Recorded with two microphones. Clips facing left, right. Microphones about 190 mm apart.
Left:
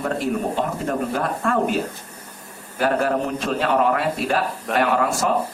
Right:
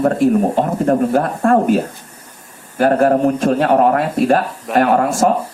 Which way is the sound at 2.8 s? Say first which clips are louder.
Right 8 dB; 50° right (ahead or behind).